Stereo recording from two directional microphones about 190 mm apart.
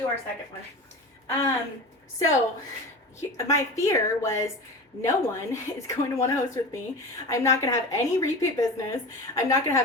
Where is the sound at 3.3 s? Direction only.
15° left (ahead or behind).